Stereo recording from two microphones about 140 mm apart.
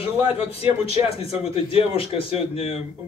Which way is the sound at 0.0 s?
45° left (ahead or behind).